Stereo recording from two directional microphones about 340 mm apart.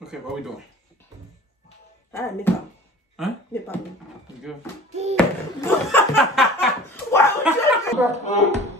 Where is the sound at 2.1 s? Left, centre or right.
Centre.